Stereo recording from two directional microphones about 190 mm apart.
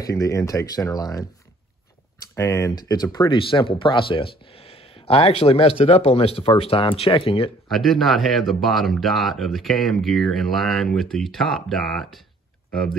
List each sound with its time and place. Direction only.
0.0 s speech: 15° left (ahead or behind)
2.3 s speech: 15° left (ahead or behind)
7.7 s speech: centre (ahead or behind)